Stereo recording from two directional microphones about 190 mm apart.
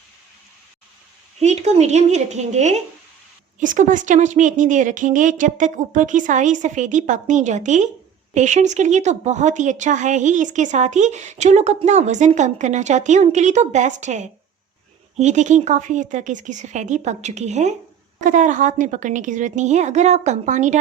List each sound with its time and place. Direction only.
1.4 s a woman's voice: 35° right (ahead or behind)